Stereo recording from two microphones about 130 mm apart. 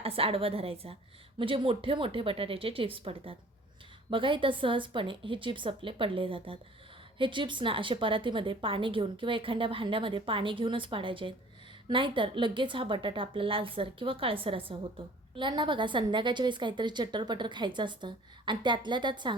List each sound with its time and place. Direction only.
0.0 s a woman's voice: 50° right (ahead or behind)